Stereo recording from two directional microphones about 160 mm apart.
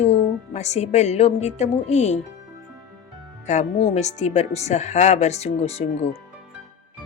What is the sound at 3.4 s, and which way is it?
Speech, 45° left (ahead or behind).